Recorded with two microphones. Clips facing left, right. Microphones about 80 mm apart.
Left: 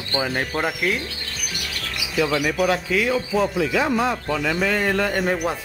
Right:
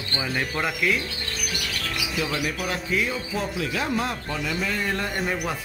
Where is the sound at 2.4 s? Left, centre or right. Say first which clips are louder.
Left 7 dB; left.